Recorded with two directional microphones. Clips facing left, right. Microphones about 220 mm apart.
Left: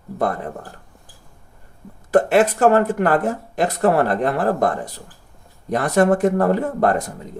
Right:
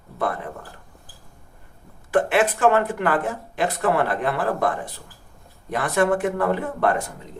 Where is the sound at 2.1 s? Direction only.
40° left (ahead or behind).